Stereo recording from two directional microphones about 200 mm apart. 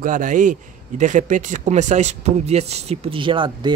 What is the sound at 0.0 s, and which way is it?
Speech, 40° right (ahead or behind).